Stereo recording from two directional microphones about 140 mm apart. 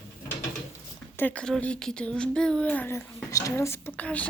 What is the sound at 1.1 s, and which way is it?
Speech, 10° left (ahead or behind).